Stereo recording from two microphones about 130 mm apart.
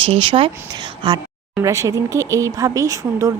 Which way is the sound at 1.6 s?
25° right (ahead or behind).